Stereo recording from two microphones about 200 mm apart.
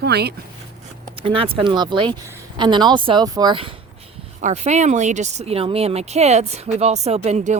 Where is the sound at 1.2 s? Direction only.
25° right (ahead or behind).